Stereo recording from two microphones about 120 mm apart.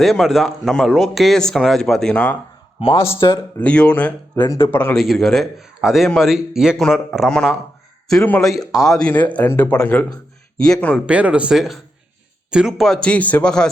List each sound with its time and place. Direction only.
0.0 s speech: centre (ahead or behind)
3.2 s speech: 30° left (ahead or behind)
3.6 s speech: 10° left (ahead or behind)
4.9 s speech: 5° left (ahead or behind)
8.1 s speech: 10° left (ahead or behind)
10.9 s speech: 10° right (ahead or behind); by 13.7 s 5° left (ahead or behind)